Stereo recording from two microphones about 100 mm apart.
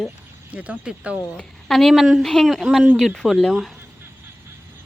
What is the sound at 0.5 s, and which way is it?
Speech, 15° right (ahead or behind).